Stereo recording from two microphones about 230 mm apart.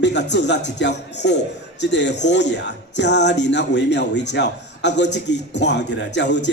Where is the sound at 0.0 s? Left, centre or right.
Left.